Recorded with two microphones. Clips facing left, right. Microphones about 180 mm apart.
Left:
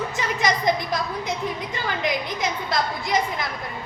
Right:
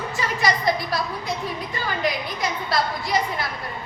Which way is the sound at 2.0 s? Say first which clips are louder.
Even; 20° left (ahead or behind).